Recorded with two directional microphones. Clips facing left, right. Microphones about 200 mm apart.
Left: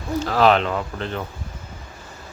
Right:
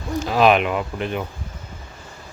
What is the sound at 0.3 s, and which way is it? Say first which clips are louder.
Speech: right 1 dB; 15° right (ahead or behind).